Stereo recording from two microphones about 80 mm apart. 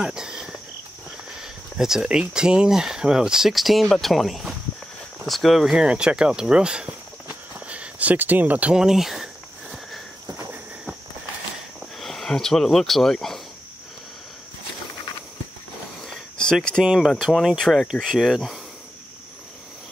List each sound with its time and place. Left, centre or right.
0.0 s cricket: centre
1.4 s speech: centre
7.6 s a sound: centre
10.2 s cricket: right
12.0 s speech: centre
16.1 s a sound: centre
16.8 s speech: centre